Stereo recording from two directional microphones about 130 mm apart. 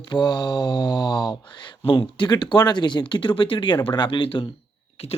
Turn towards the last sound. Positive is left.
turn(degrees=50)  # may be behind; listen again after turning